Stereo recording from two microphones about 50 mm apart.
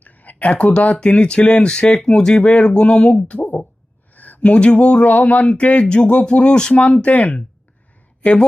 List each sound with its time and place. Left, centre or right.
0.0 s a sound: left
0.5 s speech: left
4.1 s speech: left; by 6.8 s centre
6.8 s speech: left